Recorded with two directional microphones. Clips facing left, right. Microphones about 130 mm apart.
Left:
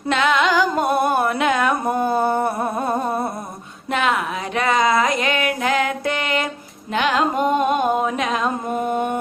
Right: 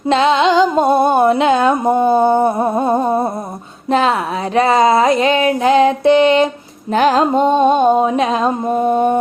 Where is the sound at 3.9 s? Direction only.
30° right (ahead or behind).